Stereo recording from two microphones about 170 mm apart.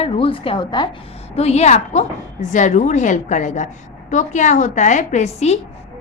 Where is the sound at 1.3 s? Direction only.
40° left (ahead or behind).